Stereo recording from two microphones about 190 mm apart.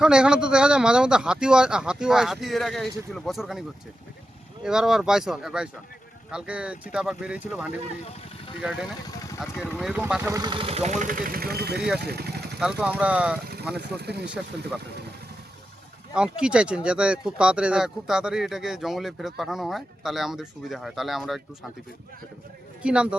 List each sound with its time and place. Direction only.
0.0 s speech: 5° right (ahead or behind)
4.6 s speech: 5° right (ahead or behind)
10.2 s speech: 20° right (ahead or behind); by 11.9 s 55° right (ahead or behind)
11.9 s vehicle: 55° right (ahead or behind)
12.5 s speech: 5° right (ahead or behind)
13.7 s speech: 60° right (ahead or behind)
16.1 s speech: 5° right (ahead or behind)
22.8 s speech: 5° right (ahead or behind)